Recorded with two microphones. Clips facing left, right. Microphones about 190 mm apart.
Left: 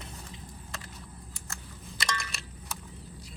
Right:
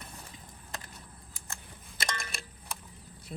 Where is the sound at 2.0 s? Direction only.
50° right (ahead or behind).